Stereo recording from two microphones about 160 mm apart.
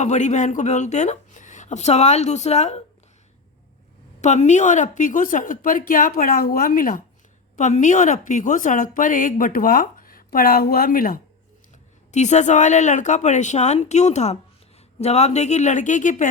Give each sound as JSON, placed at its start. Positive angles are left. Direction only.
{"t": 0.0, "sound": "speech", "side_deg": 45}
{"t": 4.2, "sound": "a woman's voice", "side_deg": 45}
{"t": 7.5, "sound": "a woman's voice", "side_deg": 50}
{"t": 12.1, "sound": "speech", "side_deg": 45}